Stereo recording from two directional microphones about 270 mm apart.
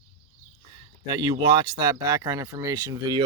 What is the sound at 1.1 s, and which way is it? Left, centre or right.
Speech, centre.